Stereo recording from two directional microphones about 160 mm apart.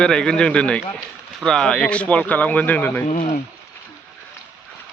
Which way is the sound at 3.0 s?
55° left (ahead or behind).